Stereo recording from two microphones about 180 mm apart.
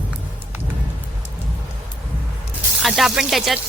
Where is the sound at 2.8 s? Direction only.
Centre (ahead or behind).